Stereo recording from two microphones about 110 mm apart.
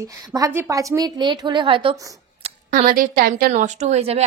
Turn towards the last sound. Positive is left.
turn(degrees=-75)  # may be behind; listen again after turning